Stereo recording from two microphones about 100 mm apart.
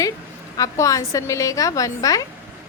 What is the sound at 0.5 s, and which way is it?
A woman's voice, 35° left (ahead or behind).